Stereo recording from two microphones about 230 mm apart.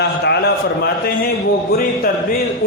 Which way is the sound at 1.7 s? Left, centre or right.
Left.